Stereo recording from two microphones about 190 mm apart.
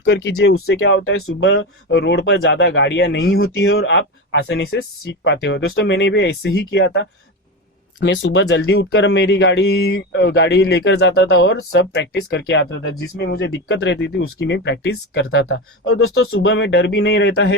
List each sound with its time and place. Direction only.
0.0 s speech: 65° left (ahead or behind); by 1.5 s 90° left
1.5 s speech: 60° left (ahead or behind)